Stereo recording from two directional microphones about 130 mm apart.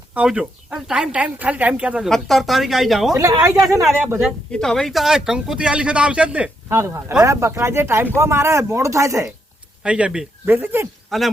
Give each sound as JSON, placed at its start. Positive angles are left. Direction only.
{"t": 0.1, "sound": "speech", "side_deg": -10}
{"t": 3.2, "sound": "speech", "side_deg": -25}
{"t": 4.5, "sound": "speech", "side_deg": 5}
{"t": 6.7, "sound": "speech", "side_deg": -20}
{"t": 9.8, "sound": "speech", "side_deg": -10}
{"t": 11.1, "sound": "speech", "side_deg": 0}